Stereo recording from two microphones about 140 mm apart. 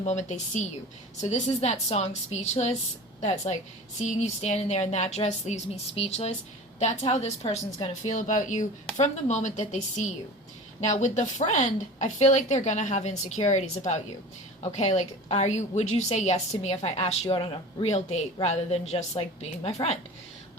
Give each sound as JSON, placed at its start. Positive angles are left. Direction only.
{"t": 0.0, "sound": "a woman's voice", "side_deg": 55}
{"t": 8.0, "sound": "a woman's voice", "side_deg": 65}